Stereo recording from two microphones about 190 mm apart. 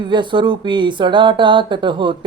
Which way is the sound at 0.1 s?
25° right (ahead or behind).